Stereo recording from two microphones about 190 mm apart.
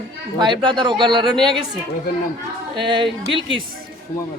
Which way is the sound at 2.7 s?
25° right (ahead or behind).